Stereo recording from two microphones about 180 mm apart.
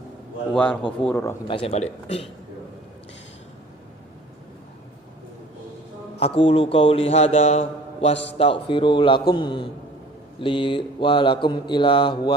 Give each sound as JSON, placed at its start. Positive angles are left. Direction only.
{"t": 0.5, "sound": "a man's voice", "side_deg": 5}
{"t": 1.5, "sound": "a man's voice", "side_deg": 30}
{"t": 6.1, "sound": "a man's voice", "side_deg": 30}
{"t": 9.3, "sound": "mantra", "side_deg": 25}